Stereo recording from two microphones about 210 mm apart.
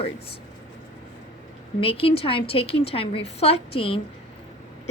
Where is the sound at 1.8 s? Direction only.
25° left (ahead or behind).